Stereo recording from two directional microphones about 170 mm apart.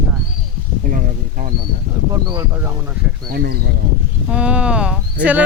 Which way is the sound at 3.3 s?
65° right (ahead or behind).